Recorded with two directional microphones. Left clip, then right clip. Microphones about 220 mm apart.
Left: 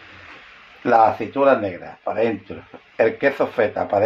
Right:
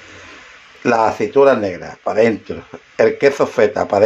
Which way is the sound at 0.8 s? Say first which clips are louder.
Right 1 dB; 45° right (ahead or behind).